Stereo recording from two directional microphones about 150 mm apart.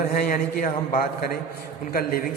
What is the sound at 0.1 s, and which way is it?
Speech, 70° left (ahead or behind).